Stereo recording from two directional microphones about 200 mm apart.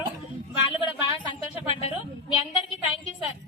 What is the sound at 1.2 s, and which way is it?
A woman's voice, 30° left (ahead or behind).